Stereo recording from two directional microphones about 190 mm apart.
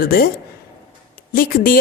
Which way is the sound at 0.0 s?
50° left (ahead or behind).